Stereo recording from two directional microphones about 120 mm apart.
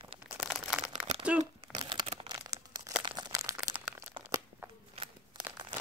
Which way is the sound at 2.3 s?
30° right (ahead or behind).